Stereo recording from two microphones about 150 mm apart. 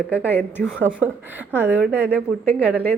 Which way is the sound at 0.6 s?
10° right (ahead or behind).